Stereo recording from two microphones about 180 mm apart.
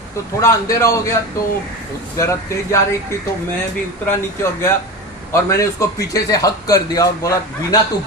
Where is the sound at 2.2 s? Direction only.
15° left (ahead or behind).